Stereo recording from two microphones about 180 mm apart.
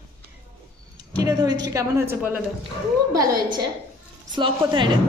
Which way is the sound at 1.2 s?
20° right (ahead or behind).